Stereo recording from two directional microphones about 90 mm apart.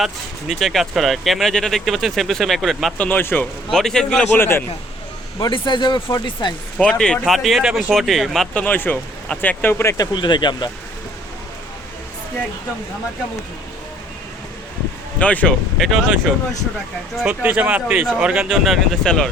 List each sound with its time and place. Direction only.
0.0 s speech: centre (ahead or behind)
3.0 s speech: 20° left (ahead or behind)
3.7 s speech: 5° left (ahead or behind)
4.3 s speech: 25° left (ahead or behind)
5.4 s speech: 60° left (ahead or behind)
6.7 s speech: 10° left (ahead or behind)
8.5 s speech: 20° left (ahead or behind)
10.0 s speech: 60° left (ahead or behind)
15.2 s speech: 15° left (ahead or behind)
15.8 s speech: centre (ahead or behind)
17.2 s speech: 15° right (ahead or behind); by 19.3 s 5° left (ahead or behind)